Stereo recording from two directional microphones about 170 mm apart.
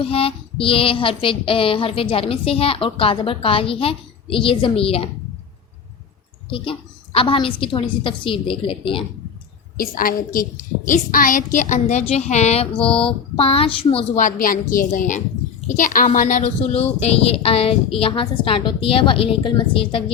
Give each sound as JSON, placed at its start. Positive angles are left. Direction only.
{"t": 0.0, "sound": "child singing", "side_deg": 35}
{"t": 6.5, "sound": "child singing", "side_deg": 30}
{"t": 9.7, "sound": "child singing", "side_deg": 55}
{"t": 14.2, "sound": "a woman's voice", "side_deg": 50}
{"t": 17.0, "sound": "child singing", "side_deg": 35}